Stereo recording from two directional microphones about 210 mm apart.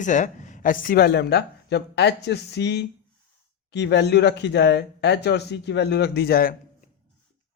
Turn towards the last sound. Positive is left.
turn(degrees=45)  # may be behind; listen again after turning